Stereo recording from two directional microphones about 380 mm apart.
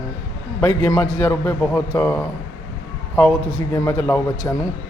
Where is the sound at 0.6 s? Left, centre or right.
Centre.